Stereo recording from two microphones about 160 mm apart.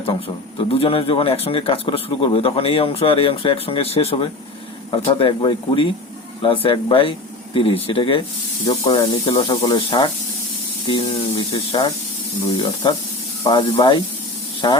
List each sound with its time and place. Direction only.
0.7 s a man's voice: 35° left (ahead or behind)